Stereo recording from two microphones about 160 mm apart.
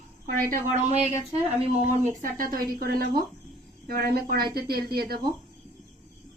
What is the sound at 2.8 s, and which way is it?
Speech, 70° right (ahead or behind).